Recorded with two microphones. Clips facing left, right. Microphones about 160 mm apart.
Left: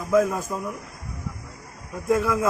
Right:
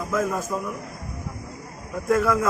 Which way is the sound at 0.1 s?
15° left (ahead or behind).